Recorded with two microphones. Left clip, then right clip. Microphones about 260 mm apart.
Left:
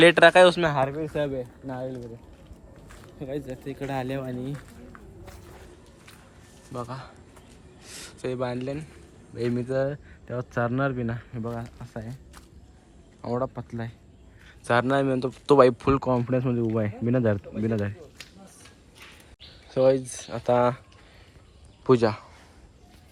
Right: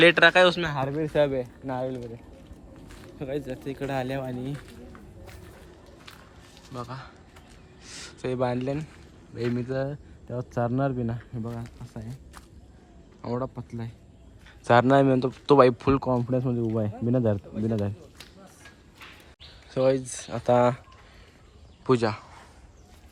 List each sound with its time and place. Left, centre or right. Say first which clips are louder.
0.0 s speech: left 2 dB; centre
0.9 s speech: right 5 dB; right
1.6 s speech: right 3 dB; centre
2.9 s speech: right 2 dB; centre
6.7 s speech: left 2 dB; centre
14.7 s speech: right 4 dB; centre
19.7 s speech: left 3 dB; centre
21.8 s speech: left 3 dB; centre